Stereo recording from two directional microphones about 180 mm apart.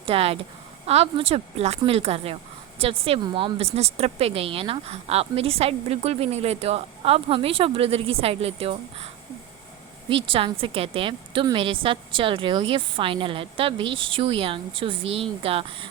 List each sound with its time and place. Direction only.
0.0 s speech: 35° right (ahead or behind)
10.3 s a woman's voice: 30° right (ahead or behind)